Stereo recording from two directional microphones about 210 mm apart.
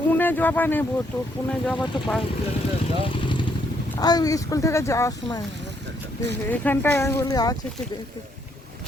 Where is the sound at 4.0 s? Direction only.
20° left (ahead or behind).